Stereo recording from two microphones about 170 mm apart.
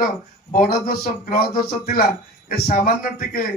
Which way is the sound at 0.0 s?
60° left (ahead or behind).